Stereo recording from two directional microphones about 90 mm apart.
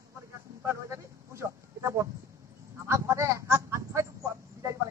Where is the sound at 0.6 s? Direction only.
30° right (ahead or behind).